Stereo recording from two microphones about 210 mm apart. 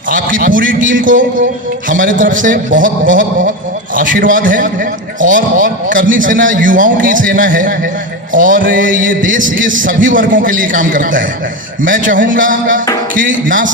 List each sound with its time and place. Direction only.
0.1 s a man's voice: 40° right (ahead or behind)